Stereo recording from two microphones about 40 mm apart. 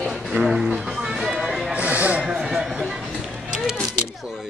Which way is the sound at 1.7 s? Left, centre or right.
Right.